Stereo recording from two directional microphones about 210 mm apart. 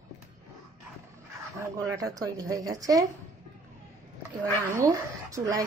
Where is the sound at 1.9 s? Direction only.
15° right (ahead or behind).